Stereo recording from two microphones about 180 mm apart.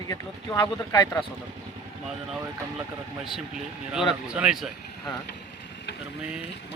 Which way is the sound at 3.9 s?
5° right (ahead or behind).